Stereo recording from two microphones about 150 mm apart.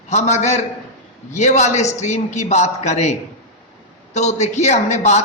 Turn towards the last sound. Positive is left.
turn(degrees=50)  # may be behind; listen again after turning